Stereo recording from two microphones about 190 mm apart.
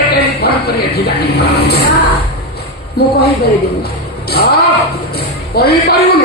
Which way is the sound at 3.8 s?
55° left (ahead or behind).